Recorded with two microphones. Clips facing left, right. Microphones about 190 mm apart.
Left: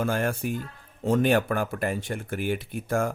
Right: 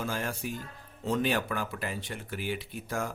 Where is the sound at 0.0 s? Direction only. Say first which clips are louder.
Left 7 dB; 55° left (ahead or behind).